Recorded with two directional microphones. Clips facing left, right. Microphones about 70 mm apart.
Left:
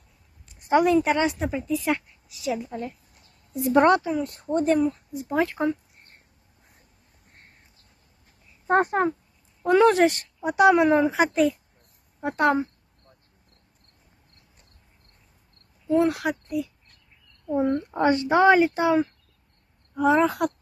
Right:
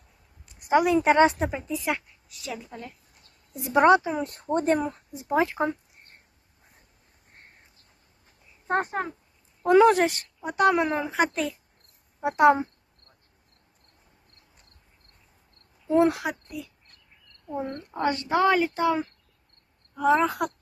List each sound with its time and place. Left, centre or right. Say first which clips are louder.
0.6 s a woman's voice: left 2 dB; centre
1.0 s speech: right 4 dB; right
1.5 s speech: left 5 dB; right
1.8 s a woman's voice: left 3 dB; centre
4.1 s speech: left 1 dB; right
5.1 s speech: even; right
8.8 s speech: left 7 dB; centre
9.6 s speech: even; centre
15.9 s speech: even; right
16.2 s speech: left 6 dB; centre
17.5 s speech: left 9 dB; centre
18.0 s a woman's voice: left 4 dB; left
20.0 s speech: left 2 dB; centre